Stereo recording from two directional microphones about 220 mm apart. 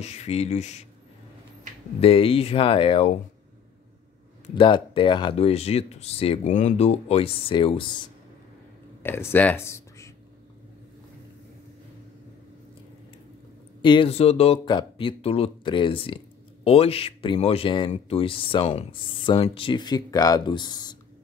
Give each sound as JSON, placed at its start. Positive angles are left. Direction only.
{"t": 0.0, "sound": "speech", "side_deg": 30}
{"t": 2.0, "sound": "speech", "side_deg": 25}
{"t": 4.6, "sound": "speech", "side_deg": 20}
{"t": 9.0, "sound": "speech", "side_deg": 10}
{"t": 13.8, "sound": "speech", "side_deg": 25}